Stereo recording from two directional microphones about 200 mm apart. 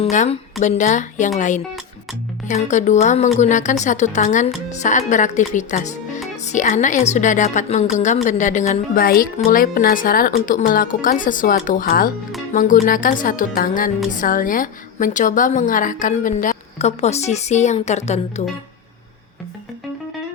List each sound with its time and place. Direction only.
0.0 s a woman's voice: 35° left (ahead or behind)